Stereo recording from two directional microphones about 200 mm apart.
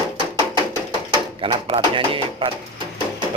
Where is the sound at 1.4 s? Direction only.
25° right (ahead or behind).